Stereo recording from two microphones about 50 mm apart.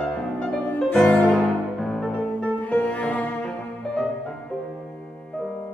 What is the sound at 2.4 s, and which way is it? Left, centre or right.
Music, left.